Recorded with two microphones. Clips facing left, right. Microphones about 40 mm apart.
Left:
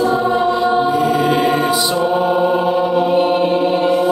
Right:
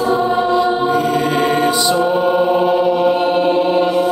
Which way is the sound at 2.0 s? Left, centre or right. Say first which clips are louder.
Right 1 dB; centre.